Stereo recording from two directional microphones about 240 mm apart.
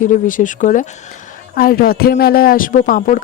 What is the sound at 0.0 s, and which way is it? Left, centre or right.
Speech, left.